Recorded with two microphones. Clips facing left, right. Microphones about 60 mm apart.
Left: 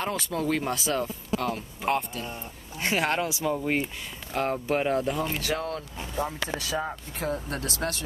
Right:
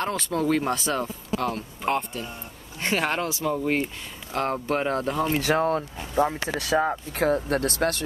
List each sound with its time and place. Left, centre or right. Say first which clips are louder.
0.0 s speech: right 3 dB; centre
5.4 s speech: right 7 dB; right
6.5 s speech: right 7 dB; right
7.3 s speech: right 8 dB; right